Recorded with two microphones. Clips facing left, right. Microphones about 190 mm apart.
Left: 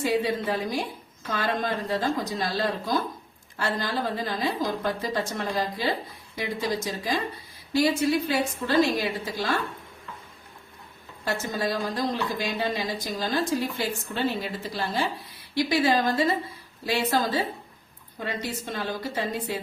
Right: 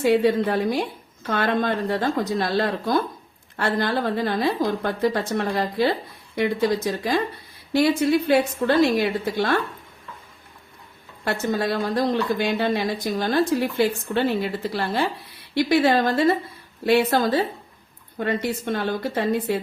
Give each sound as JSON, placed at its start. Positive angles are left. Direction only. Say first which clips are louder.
{"t": 0.0, "sound": "speech", "louder": "right 7 dB", "side_deg": -60}
{"t": 11.3, "sound": "speech", "louder": "right 5 dB", "side_deg": -60}